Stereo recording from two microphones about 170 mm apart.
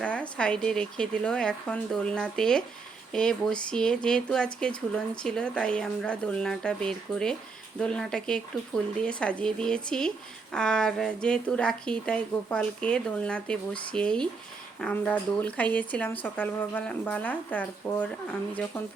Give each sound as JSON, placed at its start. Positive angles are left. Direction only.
{"t": 0.0, "sound": "speech", "side_deg": 5}